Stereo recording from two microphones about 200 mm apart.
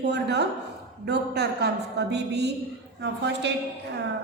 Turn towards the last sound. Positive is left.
turn(degrees=-60)  # may be behind; listen again after turning